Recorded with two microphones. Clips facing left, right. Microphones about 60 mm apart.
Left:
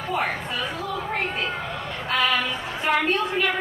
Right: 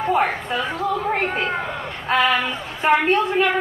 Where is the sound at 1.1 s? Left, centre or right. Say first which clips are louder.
Right 5 dB; right.